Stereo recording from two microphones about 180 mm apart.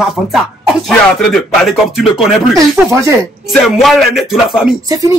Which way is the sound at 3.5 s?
Centre (ahead or behind).